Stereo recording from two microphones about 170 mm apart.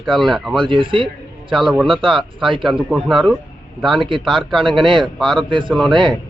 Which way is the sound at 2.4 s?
30° right (ahead or behind).